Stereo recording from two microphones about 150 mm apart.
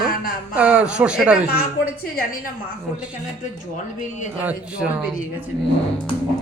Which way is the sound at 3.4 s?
55° left (ahead or behind).